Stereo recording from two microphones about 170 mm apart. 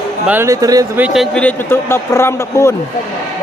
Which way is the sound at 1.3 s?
10° left (ahead or behind).